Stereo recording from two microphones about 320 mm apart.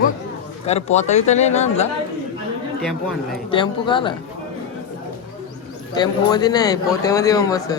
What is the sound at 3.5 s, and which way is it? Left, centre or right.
Speech, centre.